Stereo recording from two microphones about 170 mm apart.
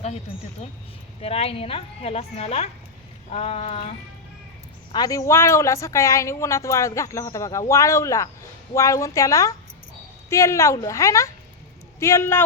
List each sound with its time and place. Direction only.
0.6 s speech: 35° left (ahead or behind)
4.9 s a woman's voice: 25° left (ahead or behind)